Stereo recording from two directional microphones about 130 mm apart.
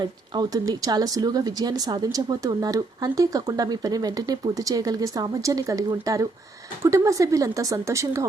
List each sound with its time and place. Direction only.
0.0 s speech: 30° right (ahead or behind)